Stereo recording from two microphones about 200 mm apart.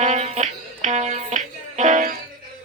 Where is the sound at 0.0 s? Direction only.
35° right (ahead or behind).